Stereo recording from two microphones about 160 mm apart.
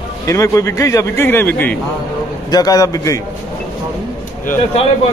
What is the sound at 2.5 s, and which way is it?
Speech, 20° left (ahead or behind).